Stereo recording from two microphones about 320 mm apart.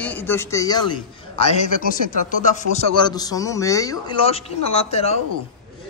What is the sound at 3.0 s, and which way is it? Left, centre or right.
A man's voice, centre.